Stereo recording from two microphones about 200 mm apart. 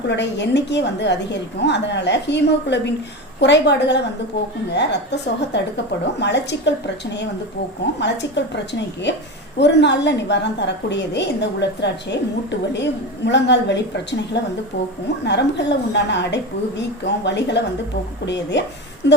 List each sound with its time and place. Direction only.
0.1 s a woman's voice: 60° left (ahead or behind)
8.0 s a woman's voice: 60° left (ahead or behind)